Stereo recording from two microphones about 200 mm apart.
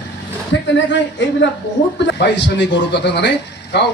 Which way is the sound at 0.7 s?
65° left (ahead or behind).